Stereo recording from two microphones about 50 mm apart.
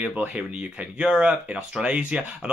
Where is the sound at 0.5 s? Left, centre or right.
Centre.